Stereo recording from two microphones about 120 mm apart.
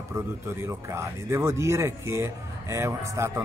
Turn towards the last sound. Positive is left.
turn(degrees=-20)  # may be behind; listen again after turning